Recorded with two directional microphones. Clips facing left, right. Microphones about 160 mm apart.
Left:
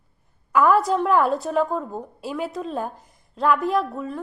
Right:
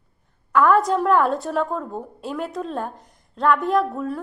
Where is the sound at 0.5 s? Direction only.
5° left (ahead or behind).